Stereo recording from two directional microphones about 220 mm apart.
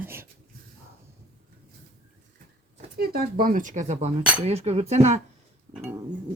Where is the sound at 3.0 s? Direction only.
45° right (ahead or behind).